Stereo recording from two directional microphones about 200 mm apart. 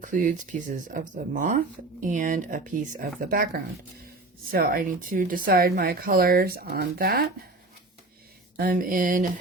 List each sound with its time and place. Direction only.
0.0 s speech: 40° right (ahead or behind)
8.5 s speech: 45° right (ahead or behind)